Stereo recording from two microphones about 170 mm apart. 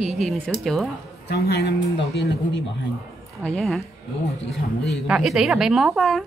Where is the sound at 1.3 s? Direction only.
70° left (ahead or behind).